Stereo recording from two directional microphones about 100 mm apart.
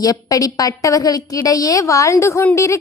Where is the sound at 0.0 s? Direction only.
35° left (ahead or behind).